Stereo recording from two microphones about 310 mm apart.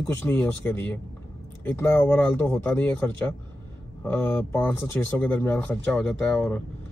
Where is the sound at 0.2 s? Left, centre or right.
Centre.